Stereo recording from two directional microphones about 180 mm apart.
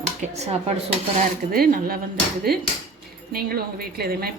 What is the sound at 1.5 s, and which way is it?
Speech, 55° right (ahead or behind).